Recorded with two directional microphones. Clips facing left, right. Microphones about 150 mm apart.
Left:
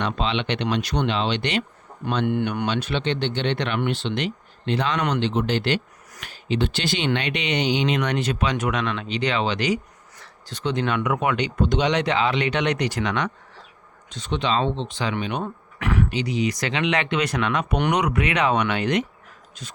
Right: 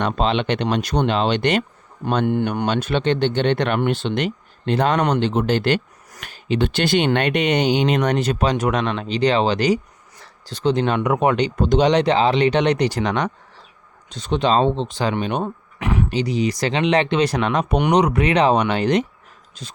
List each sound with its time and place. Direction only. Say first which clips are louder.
0.0 s speech: right 5 dB; 45° right (ahead or behind)
15.4 s a sound: right 2 dB; 20° right (ahead or behind)
16.0 s speech: right 3 dB; 35° right (ahead or behind)